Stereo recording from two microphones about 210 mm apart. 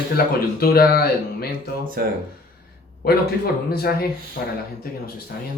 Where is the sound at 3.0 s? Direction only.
50° left (ahead or behind).